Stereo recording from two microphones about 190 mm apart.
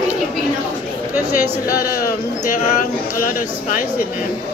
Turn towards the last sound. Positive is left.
turn(degrees=45)  # may be behind; listen again after turning